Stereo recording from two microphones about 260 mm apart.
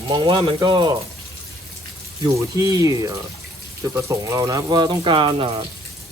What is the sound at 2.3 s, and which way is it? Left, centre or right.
Speech, centre.